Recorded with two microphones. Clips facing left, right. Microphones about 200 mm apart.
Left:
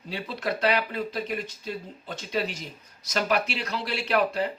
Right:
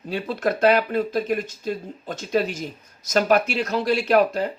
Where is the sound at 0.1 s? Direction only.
50° right (ahead or behind).